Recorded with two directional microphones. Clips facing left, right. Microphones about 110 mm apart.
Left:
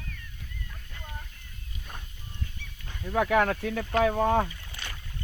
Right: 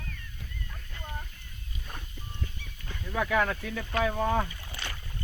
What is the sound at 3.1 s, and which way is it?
Speech, 60° left (ahead or behind).